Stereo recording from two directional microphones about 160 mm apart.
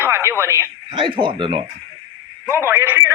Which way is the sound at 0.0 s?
15° right (ahead or behind).